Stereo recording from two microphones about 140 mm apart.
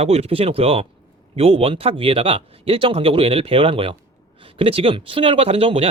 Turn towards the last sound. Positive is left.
turn(degrees=-45)  # may be behind; listen again after turning